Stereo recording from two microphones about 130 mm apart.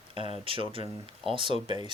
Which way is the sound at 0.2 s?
45° right (ahead or behind).